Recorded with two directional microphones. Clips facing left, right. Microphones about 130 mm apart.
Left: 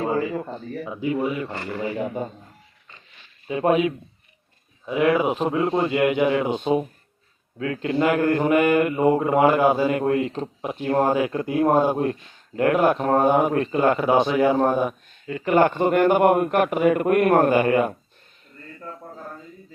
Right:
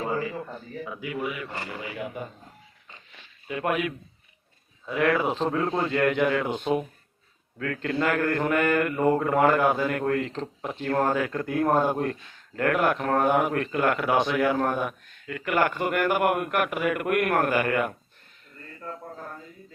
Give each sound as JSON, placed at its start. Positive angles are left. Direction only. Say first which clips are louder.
{"t": 0.0, "sound": "a sound", "louder": "left 5 dB", "side_deg": 25}
{"t": 0.9, "sound": "speech", "louder": "left 8 dB", "side_deg": 30}
{"t": 3.4, "sound": "mantra", "louder": "left 7 dB", "side_deg": 25}
{"t": 4.9, "sound": "a man's voice", "louder": "left 4 dB", "side_deg": 20}
{"t": 7.6, "sound": "mantra", "louder": "left 5 dB", "side_deg": 20}